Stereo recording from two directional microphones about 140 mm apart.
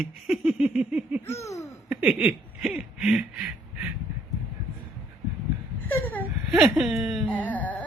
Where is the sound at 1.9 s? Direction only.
10° right (ahead or behind).